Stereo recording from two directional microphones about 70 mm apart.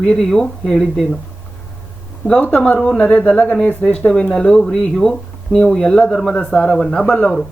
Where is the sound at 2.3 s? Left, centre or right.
Left.